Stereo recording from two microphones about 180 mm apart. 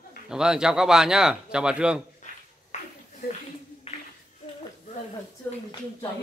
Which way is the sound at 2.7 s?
40° left (ahead or behind).